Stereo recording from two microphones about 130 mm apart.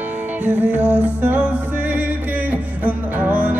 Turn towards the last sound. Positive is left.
turn(degrees=-15)  # may be behind; listen again after turning